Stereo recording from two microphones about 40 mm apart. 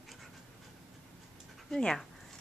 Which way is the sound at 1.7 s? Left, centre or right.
Centre.